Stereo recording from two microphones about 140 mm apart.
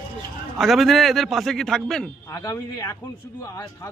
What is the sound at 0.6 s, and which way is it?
A man's voice, centre (ahead or behind).